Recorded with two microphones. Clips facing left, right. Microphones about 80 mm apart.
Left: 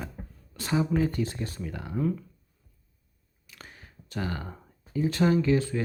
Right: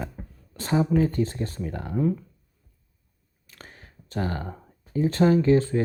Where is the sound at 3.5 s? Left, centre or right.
Right.